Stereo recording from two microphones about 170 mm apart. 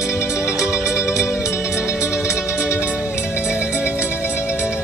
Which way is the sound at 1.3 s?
15° left (ahead or behind).